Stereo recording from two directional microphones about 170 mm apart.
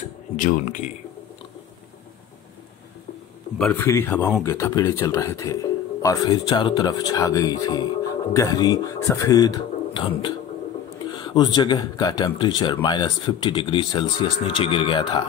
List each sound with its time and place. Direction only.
3.5 s speech: 5° left (ahead or behind)
3.8 s speech: 15° left (ahead or behind)